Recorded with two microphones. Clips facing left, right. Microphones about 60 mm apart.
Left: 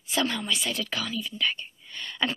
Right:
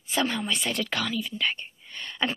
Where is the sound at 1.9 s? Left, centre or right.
Centre.